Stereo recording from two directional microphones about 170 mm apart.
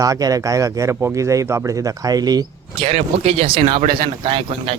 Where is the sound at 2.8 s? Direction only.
35° right (ahead or behind).